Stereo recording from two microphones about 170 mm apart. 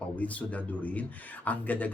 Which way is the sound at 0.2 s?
10° left (ahead or behind).